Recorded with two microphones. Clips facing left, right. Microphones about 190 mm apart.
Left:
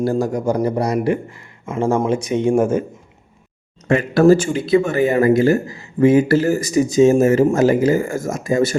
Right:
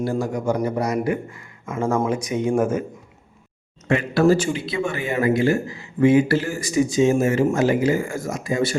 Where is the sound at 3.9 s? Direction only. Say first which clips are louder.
Left 5 dB; 45° left (ahead or behind).